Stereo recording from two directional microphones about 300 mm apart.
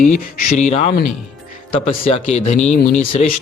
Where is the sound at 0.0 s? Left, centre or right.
Left.